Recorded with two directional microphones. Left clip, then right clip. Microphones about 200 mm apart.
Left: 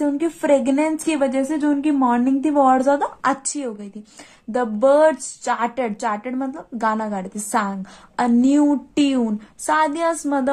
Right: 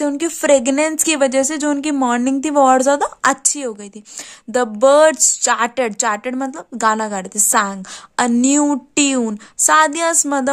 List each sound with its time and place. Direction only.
0.0 s a woman's voice: 55° right (ahead or behind); by 10.5 s 40° right (ahead or behind)